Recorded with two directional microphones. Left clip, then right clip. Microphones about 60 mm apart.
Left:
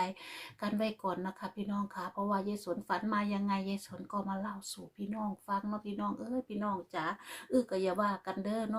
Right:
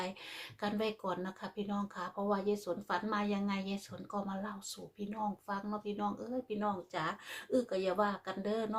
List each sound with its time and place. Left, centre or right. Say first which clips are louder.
0.6 s speech: left 1 dB; left
6.9 s speech: left 1 dB; centre
7.7 s speech: left 1 dB; left